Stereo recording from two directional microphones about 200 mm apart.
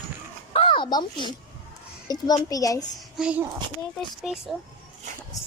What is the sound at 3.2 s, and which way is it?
A child's voice, 5° right (ahead or behind).